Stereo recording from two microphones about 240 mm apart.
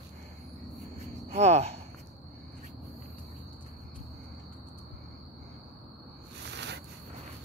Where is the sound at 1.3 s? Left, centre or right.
Right.